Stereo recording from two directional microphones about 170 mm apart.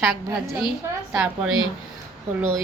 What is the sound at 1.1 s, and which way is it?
Speech, 5° right (ahead or behind).